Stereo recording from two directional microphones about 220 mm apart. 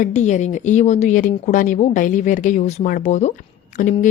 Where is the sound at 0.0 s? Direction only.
35° left (ahead or behind).